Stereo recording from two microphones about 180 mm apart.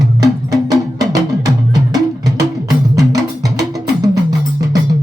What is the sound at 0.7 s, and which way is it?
Music, 20° right (ahead or behind).